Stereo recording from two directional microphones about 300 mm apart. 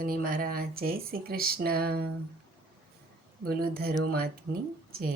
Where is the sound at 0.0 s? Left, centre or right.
Right.